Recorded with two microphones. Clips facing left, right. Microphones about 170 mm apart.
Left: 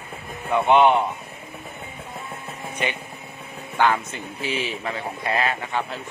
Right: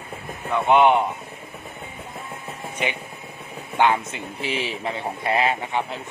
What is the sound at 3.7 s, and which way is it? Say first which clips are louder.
Speech: right 1 dB; 25° right (ahead or behind).